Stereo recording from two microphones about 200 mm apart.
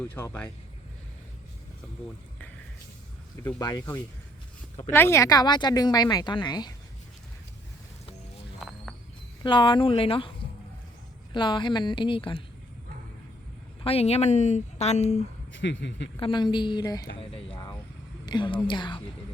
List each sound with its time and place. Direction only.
0.1 s speech: 10° left (ahead or behind)
3.4 s speech: 20° left (ahead or behind)
8.6 s a sound: centre (ahead or behind)
9.4 s speech: 25° left (ahead or behind)
11.3 s speech: 25° left (ahead or behind)
13.8 s speech: 30° left (ahead or behind)
15.5 s a man's voice: 65° left (ahead or behind)
16.1 s speech: 25° left (ahead or behind)